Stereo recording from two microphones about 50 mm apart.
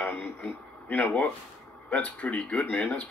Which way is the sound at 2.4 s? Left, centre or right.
Centre.